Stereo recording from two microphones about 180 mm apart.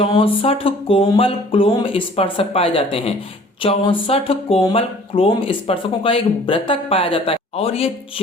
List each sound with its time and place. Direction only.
0.0 s speech: 30° left (ahead or behind)